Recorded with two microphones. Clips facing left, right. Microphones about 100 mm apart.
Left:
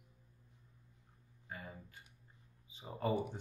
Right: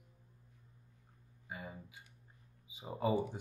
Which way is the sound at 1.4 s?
10° right (ahead or behind).